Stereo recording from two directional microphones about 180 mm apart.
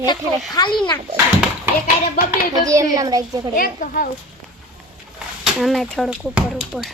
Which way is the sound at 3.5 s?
50° left (ahead or behind).